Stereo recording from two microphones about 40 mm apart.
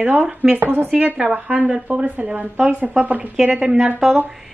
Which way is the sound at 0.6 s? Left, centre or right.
Right.